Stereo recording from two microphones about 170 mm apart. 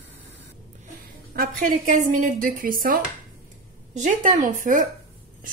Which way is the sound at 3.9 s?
45° right (ahead or behind).